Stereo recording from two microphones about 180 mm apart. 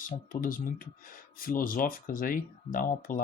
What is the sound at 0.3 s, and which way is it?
Speech, 50° left (ahead or behind).